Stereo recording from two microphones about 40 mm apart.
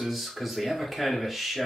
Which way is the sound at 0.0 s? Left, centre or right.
Centre.